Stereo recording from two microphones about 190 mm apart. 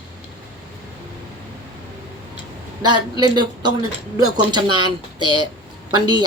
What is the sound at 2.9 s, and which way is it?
Speech, 20° right (ahead or behind).